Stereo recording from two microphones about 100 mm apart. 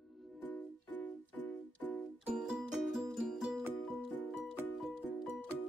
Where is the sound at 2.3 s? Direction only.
5° right (ahead or behind).